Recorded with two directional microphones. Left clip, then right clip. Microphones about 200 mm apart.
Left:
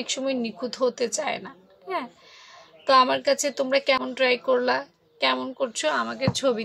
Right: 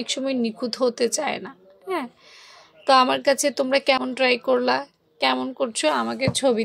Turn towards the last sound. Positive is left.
turn(degrees=-25)  # may be behind; listen again after turning